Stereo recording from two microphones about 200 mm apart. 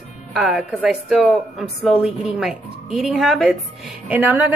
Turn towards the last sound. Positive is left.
turn(degrees=-10)  # may be behind; listen again after turning